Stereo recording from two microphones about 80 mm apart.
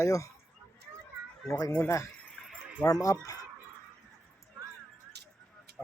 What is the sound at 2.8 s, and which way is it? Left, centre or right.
Speech, left.